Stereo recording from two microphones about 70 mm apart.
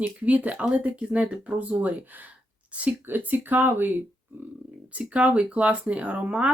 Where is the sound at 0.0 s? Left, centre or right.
Centre.